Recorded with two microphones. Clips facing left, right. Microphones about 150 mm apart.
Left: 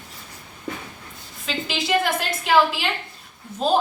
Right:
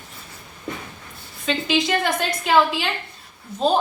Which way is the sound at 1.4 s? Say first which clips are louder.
Right 4 dB; 5° left (ahead or behind).